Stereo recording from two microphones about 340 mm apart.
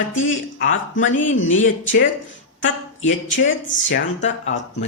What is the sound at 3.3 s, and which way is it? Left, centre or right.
Speech, left.